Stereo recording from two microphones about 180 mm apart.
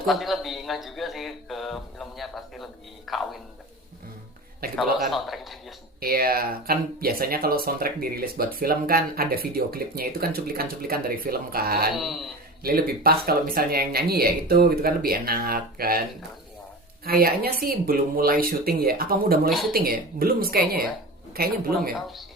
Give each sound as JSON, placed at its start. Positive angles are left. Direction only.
{"t": 0.0, "sound": "speech", "side_deg": 0}
{"t": 4.6, "sound": "speech", "side_deg": -55}
{"t": 5.1, "sound": "speech", "side_deg": 0}
{"t": 6.0, "sound": "speech", "side_deg": -55}
{"t": 11.9, "sound": "speech", "side_deg": 0}
{"t": 12.6, "sound": "speech", "side_deg": -55}
{"t": 17.0, "sound": "speech", "side_deg": -55}
{"t": 21.9, "sound": "speech", "side_deg": 0}